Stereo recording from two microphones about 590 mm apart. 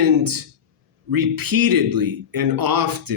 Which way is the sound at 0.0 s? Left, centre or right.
Right.